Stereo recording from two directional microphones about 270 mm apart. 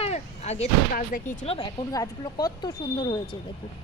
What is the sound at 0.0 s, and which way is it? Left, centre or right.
Speech, left.